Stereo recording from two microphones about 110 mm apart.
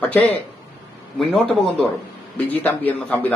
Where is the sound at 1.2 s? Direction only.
Centre (ahead or behind).